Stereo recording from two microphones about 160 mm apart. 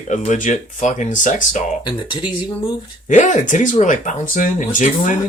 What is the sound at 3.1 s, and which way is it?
Speech, 50° left (ahead or behind).